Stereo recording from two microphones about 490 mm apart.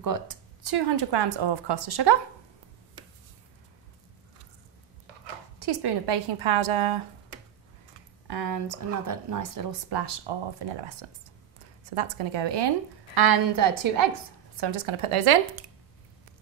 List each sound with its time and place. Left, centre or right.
0.0 s speech: right
5.6 s a woman's voice: right
8.3 s a woman's voice: right
11.9 s speech: right
14.6 s speech: right